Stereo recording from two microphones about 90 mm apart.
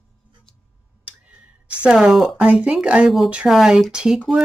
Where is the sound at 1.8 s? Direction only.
10° right (ahead or behind).